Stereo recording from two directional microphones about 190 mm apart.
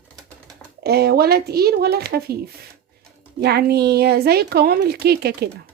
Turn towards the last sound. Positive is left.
turn(degrees=-55)  # may be behind; listen again after turning